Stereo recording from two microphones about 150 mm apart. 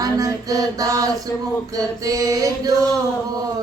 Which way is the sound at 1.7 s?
25° right (ahead or behind).